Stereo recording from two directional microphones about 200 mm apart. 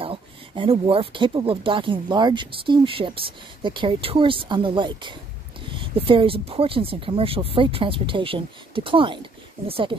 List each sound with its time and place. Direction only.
0.0 s speech: 25° right (ahead or behind)